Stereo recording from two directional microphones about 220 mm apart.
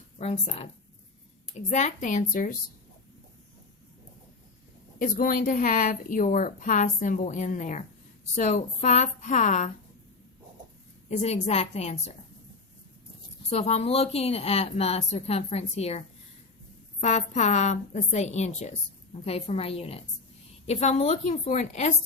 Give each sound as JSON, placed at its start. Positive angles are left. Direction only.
{"t": 0.2, "sound": "a woman's voice", "side_deg": 30}
{"t": 4.9, "sound": "a woman's voice", "side_deg": 40}
{"t": 11.2, "sound": "a woman's voice", "side_deg": 30}
{"t": 13.5, "sound": "a woman's voice", "side_deg": 30}